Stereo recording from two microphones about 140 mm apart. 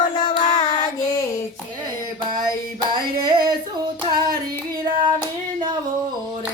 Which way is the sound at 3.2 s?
30° right (ahead or behind).